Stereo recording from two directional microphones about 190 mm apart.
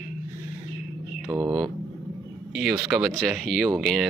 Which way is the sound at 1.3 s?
20° right (ahead or behind).